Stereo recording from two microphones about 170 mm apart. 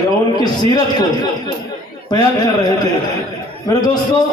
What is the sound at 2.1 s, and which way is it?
Speech, 25° left (ahead or behind).